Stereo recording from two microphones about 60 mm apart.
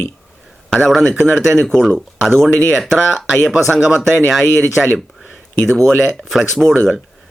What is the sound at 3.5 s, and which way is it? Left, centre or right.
Speech, centre.